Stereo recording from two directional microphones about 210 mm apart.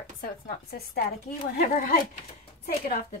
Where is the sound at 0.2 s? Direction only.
45° left (ahead or behind).